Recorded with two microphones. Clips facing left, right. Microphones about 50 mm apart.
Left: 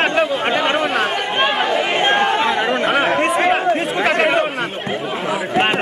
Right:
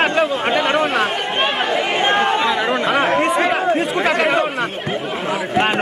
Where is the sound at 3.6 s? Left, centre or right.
Centre.